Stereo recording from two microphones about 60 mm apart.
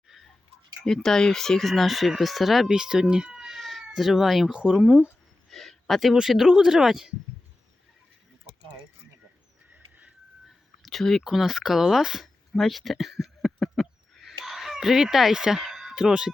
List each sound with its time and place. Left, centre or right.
0.9 s speech: centre
2.6 s cat: centre
3.9 s speech: centre
5.5 s speech: centre
9.7 s a sound: right
10.8 s a sound: centre